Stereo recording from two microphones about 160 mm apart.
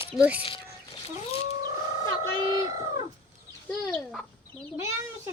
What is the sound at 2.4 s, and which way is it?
Speech, 30° right (ahead or behind).